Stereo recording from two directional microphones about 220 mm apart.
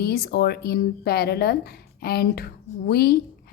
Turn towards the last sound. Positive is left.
turn(degrees=45)  # may be behind; listen again after turning